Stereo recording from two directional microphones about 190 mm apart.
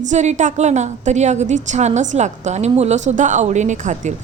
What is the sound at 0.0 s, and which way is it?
A woman's voice, 40° right (ahead or behind).